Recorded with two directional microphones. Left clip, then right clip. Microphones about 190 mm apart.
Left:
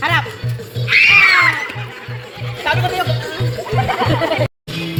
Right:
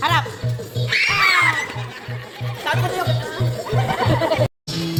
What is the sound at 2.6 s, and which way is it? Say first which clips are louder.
Music: left 5 dB; 45° left (ahead or behind).